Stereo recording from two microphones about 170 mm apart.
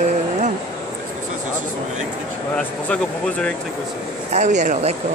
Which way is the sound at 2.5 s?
5° left (ahead or behind).